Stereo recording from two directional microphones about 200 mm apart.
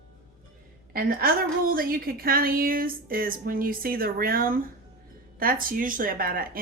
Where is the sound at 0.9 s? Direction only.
45° right (ahead or behind).